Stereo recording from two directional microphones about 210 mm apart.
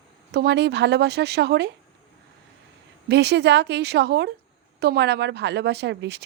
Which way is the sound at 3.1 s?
55° right (ahead or behind).